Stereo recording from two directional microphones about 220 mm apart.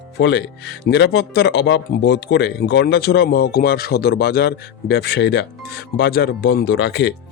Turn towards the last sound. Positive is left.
turn(degrees=55)  # may be behind; listen again after turning